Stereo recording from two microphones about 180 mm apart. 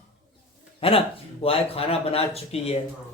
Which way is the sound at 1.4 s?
35° left (ahead or behind).